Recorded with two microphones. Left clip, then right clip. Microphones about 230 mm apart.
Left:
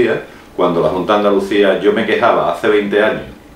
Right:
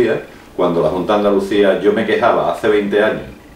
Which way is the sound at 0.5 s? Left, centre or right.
Left.